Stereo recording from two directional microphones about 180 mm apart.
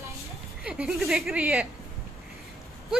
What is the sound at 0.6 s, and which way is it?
A woman's voice, 5° right (ahead or behind).